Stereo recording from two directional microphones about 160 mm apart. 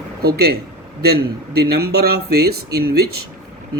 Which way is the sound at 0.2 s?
80° right.